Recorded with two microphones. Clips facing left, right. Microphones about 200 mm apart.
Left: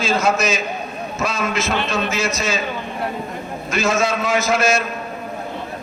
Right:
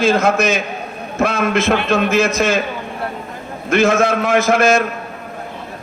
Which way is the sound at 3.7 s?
55° right (ahead or behind).